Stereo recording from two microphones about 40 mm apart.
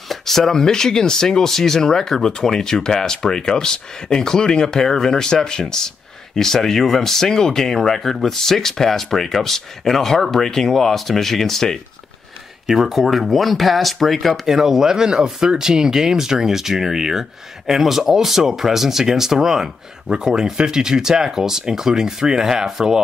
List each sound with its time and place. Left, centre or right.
0.1 s speech: centre
12.6 s speech: centre
14.4 s speech: centre